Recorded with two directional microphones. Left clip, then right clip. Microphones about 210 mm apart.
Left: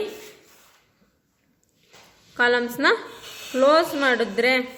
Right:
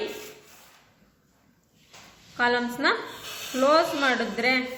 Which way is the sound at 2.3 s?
45° left (ahead or behind).